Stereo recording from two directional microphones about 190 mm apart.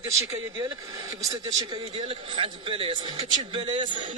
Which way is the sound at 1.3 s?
25° right (ahead or behind).